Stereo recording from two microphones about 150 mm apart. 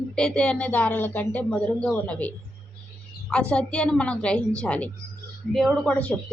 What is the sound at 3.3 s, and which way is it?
Speech, 5° left (ahead or behind).